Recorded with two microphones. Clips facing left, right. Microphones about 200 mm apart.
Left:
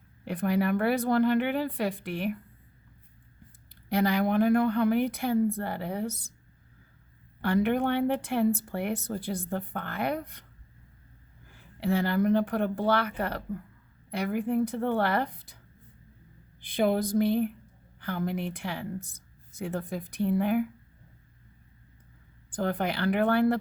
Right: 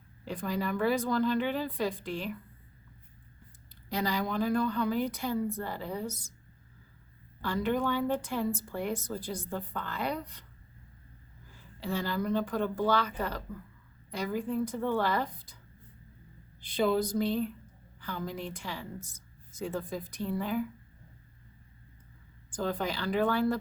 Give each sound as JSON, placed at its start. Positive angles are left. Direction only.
{"t": 0.3, "sound": "speech", "side_deg": 60}
{"t": 3.8, "sound": "speech", "side_deg": 60}
{"t": 7.4, "sound": "speech", "side_deg": 60}
{"t": 11.5, "sound": "speech", "side_deg": 60}
{"t": 16.6, "sound": "speech", "side_deg": 55}
{"t": 22.5, "sound": "speech", "side_deg": 60}